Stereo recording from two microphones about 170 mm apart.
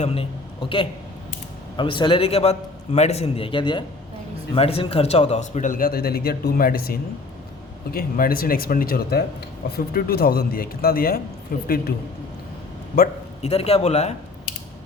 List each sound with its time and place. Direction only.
0.0 s a man's voice: 35° left (ahead or behind); by 11.7 s 60° left (ahead or behind)
12.9 s speech: 60° left (ahead or behind)
13.4 s a man's voice: 35° left (ahead or behind)